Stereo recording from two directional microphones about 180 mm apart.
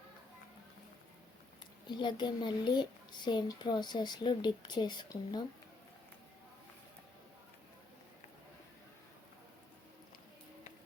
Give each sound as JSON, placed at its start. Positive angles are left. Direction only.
{"t": 1.5, "sound": "a child's voice", "side_deg": 25}